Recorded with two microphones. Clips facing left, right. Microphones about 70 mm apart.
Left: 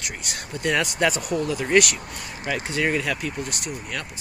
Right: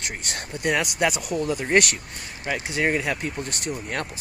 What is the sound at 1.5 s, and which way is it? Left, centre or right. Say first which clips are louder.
Speech: left 1 dB; right.